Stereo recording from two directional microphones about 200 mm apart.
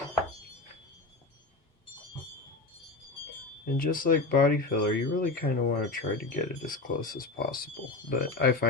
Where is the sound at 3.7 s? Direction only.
45° left (ahead or behind).